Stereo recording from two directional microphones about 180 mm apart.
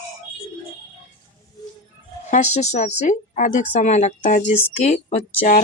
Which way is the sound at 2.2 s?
40° left (ahead or behind).